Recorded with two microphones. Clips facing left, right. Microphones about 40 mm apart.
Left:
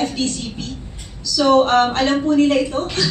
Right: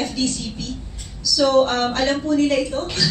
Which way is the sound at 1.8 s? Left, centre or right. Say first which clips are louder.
Left 3 dB; left.